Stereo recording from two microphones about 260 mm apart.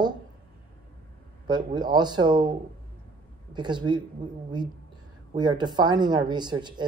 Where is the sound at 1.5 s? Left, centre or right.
Centre.